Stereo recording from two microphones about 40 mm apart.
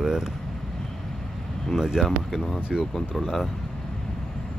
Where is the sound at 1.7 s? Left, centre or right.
Centre.